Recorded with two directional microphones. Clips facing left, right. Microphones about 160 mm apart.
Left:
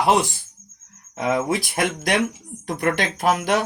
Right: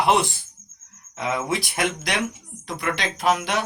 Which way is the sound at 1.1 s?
45° left (ahead or behind).